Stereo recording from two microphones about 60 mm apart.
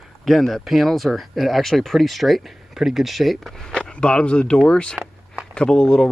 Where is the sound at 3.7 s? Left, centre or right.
Centre.